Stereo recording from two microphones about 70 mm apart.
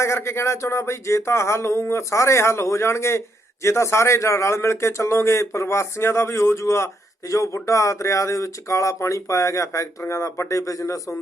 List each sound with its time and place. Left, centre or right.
0.0 s a man's voice: left